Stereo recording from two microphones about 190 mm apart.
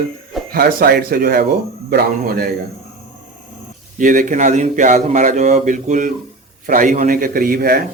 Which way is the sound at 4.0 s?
45° right (ahead or behind).